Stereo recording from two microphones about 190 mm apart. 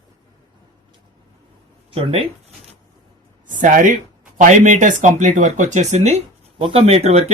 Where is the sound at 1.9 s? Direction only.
30° right (ahead or behind).